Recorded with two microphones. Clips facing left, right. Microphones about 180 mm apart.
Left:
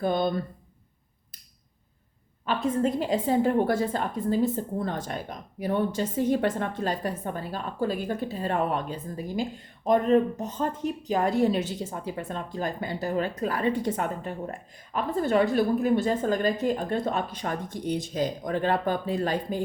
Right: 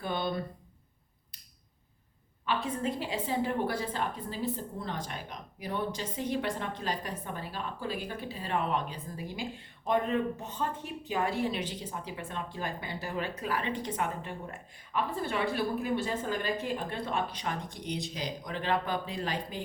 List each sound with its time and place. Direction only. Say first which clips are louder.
0.0 s a woman's voice: left 7 dB; 45° left (ahead or behind)
2.6 s a woman's voice: left 8 dB; 45° left (ahead or behind)